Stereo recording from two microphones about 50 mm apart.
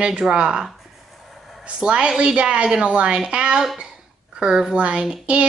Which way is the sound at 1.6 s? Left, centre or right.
Right.